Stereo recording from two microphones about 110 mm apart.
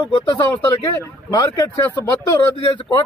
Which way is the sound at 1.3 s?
30° left (ahead or behind).